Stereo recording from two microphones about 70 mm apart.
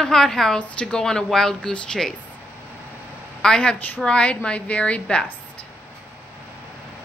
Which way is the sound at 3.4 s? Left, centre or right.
Centre.